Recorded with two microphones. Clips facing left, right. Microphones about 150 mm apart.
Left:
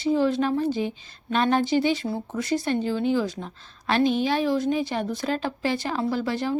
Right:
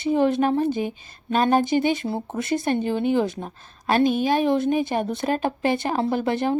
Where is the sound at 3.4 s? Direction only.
45° right (ahead or behind).